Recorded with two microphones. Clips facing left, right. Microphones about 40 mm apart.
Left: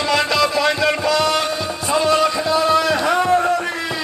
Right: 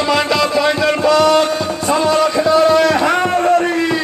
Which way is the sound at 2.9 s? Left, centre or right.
Right.